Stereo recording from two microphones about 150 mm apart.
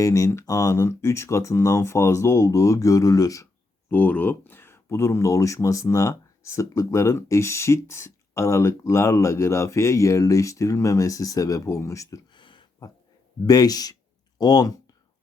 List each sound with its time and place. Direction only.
0.0 s speech: 20° left (ahead or behind)
3.8 s speech: 10° left (ahead or behind)